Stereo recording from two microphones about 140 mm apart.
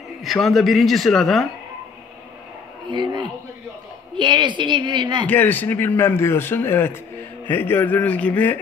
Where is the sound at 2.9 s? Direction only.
35° right (ahead or behind).